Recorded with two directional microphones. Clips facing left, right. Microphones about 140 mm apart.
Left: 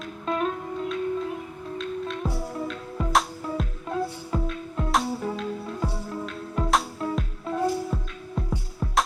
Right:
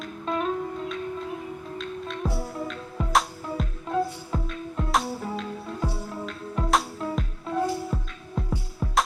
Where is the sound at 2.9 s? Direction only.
Centre (ahead or behind).